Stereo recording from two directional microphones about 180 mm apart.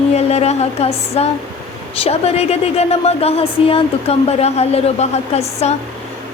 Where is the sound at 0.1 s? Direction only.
35° left (ahead or behind).